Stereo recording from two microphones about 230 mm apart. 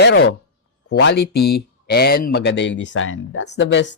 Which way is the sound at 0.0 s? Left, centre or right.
Left.